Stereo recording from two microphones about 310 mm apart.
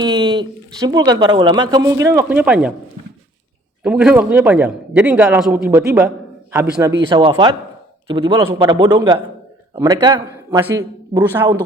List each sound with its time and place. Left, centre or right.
0.0 s a man's voice: centre
3.8 s a man's voice: centre